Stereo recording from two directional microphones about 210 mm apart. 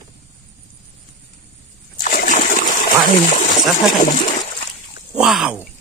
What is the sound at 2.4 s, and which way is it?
Water, 40° left (ahead or behind).